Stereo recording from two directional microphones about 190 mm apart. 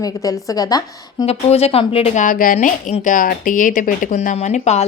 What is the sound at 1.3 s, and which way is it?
Speech, 30° left (ahead or behind).